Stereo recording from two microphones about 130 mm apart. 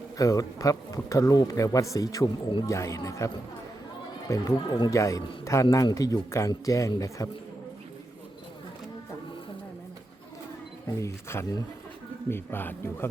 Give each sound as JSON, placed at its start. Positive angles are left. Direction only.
{"t": 0.2, "sound": "speech", "side_deg": 25}
{"t": 10.8, "sound": "speech", "side_deg": 20}